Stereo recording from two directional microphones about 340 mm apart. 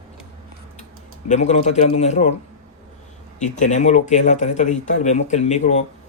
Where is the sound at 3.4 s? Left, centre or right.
Left.